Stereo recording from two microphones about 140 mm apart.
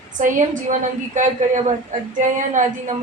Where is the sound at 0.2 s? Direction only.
65° right (ahead or behind).